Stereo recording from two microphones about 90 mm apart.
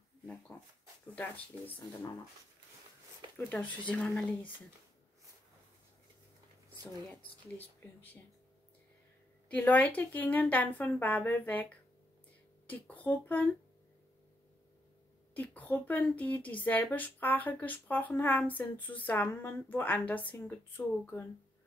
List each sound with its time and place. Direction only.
1.5 s speech: 20° left (ahead or behind)
3.2 s a sound: 50° right (ahead or behind)
3.5 s speech: 10° left (ahead or behind)
7.1 s speech: 20° left (ahead or behind)
9.5 s speech: 20° left (ahead or behind)
15.3 s speech: 20° left (ahead or behind)